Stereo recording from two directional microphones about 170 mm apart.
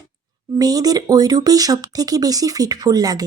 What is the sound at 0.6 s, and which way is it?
A woman's voice, 20° right (ahead or behind).